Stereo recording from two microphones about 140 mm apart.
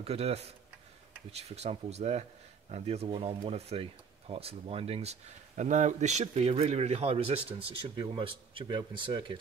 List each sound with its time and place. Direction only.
0.0 s speech: 45° right (ahead or behind)